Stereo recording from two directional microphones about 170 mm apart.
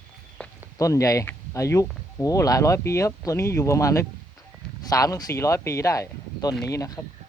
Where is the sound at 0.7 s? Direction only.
20° left (ahead or behind).